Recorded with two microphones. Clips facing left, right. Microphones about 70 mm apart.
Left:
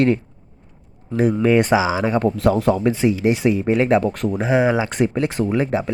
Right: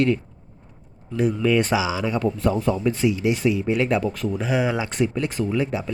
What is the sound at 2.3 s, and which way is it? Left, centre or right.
Speech, left.